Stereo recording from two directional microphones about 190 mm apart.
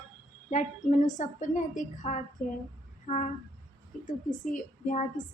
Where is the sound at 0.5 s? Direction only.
40° left (ahead or behind).